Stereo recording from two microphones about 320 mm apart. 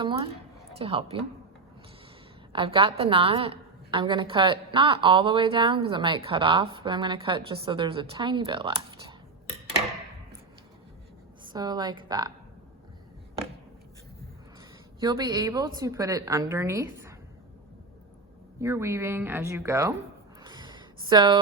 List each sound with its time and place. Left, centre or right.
0.0 s a woman's voice: centre
2.5 s a woman's voice: centre
11.4 s a woman's voice: centre
15.0 s a woman's voice: centre
18.6 s a woman's voice: centre
20.4 s a sound: centre